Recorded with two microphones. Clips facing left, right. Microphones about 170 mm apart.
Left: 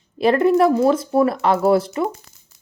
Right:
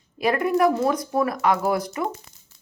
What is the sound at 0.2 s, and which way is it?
Speech, 30° left (ahead or behind).